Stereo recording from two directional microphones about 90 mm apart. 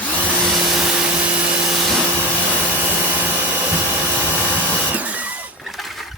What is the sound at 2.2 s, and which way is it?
Vacuum cleaner, 20° right (ahead or behind).